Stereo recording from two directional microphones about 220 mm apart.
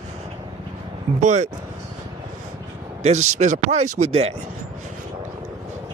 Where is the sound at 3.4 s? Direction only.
30° right (ahead or behind).